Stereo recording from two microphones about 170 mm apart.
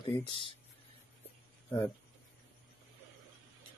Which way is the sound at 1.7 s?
30° left (ahead or behind).